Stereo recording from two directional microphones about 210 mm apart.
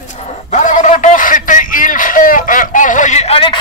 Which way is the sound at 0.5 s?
35° left (ahead or behind).